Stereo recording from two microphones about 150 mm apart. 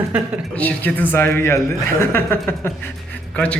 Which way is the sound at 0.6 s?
10° left (ahead or behind).